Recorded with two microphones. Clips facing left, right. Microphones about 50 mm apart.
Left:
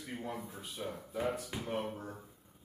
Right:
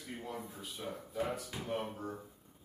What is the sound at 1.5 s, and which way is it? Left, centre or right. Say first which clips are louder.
Speech: left 1 dB; centre.